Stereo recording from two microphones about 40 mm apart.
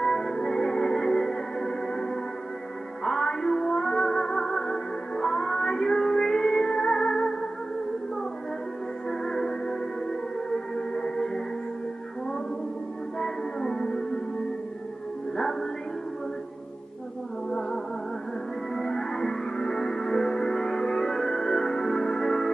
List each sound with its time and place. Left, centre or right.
0.0 s music: centre
9.2 s music: centre
13.2 s music: centre
15.3 s music: centre
17.5 s music: centre
18.8 s music: centre